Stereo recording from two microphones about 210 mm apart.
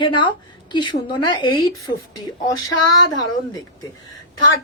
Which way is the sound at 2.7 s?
75° left (ahead or behind).